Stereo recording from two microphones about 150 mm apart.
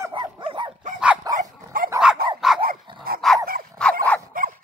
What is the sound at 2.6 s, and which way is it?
Dog, 80° right.